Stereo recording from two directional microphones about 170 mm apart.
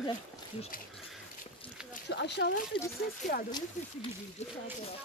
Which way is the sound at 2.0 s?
90° left.